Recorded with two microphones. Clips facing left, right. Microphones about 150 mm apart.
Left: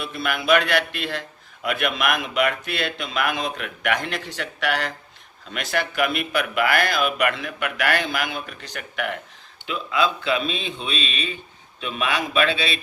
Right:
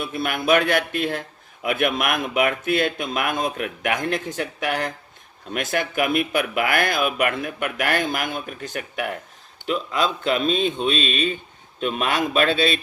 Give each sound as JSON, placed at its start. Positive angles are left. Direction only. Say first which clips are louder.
{"t": 0.0, "sound": "speech", "louder": "right 2 dB", "side_deg": -50}
{"t": 5.5, "sound": "speech", "louder": "right 1 dB", "side_deg": -50}
{"t": 9.6, "sound": "speech", "louder": "even", "side_deg": -40}